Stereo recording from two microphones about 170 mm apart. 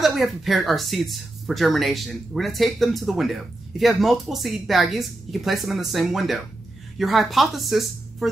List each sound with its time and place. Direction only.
0.0 s speech: centre (ahead or behind)